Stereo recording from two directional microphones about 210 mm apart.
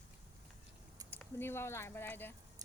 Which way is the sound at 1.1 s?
10° left (ahead or behind).